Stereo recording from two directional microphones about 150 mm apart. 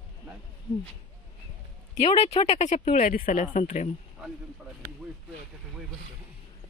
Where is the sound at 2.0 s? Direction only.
45° left (ahead or behind).